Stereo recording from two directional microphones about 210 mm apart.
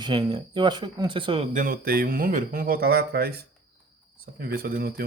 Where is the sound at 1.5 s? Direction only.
40° right (ahead or behind).